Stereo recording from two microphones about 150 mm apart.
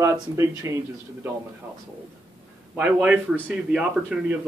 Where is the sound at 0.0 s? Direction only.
20° right (ahead or behind).